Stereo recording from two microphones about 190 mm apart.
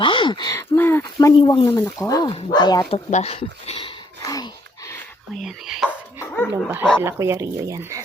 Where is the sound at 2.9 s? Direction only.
35° left (ahead or behind); by 5.0 s 15° left (ahead or behind).